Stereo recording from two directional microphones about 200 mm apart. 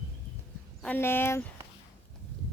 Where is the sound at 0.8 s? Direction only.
10° left (ahead or behind).